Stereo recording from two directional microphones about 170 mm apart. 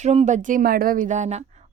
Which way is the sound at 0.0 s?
40° right (ahead or behind).